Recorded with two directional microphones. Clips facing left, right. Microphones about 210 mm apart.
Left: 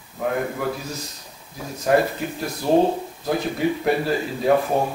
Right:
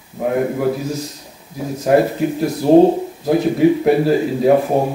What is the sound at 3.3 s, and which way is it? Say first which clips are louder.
Speech: right 9 dB; 10° right (ahead or behind).